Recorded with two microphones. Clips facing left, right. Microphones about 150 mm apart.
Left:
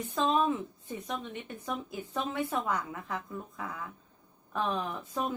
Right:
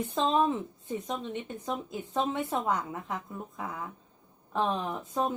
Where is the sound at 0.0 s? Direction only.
25° right (ahead or behind).